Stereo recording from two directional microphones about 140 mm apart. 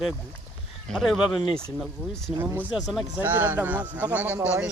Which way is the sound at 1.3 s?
40° left (ahead or behind).